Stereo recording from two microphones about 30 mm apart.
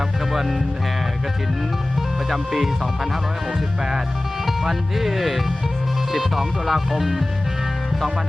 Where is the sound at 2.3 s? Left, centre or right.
Centre.